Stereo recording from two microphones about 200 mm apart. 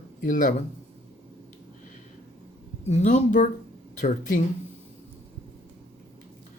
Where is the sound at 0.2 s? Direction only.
40° left (ahead or behind).